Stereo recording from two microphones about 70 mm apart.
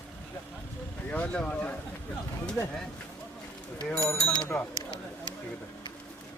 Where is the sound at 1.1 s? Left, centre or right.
Centre.